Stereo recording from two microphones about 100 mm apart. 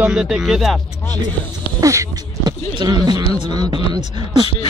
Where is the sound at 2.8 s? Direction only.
45° right (ahead or behind).